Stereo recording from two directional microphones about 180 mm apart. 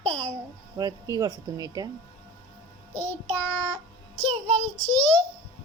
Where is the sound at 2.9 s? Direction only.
10° left (ahead or behind).